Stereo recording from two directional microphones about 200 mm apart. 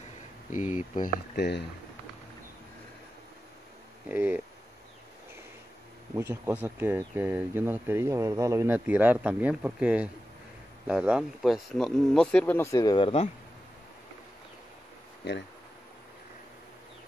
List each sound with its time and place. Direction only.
0.9 s speech: 50° left (ahead or behind)
4.1 s speech: 10° right (ahead or behind)
6.1 s speech: 15° right (ahead or behind); by 13.3 s 30° left (ahead or behind)